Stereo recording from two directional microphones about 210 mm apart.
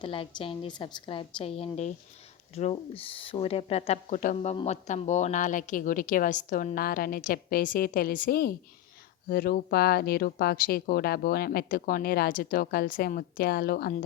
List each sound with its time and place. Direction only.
0.0 s a woman's voice: 25° left (ahead or behind); by 14.0 s 45° left (ahead or behind)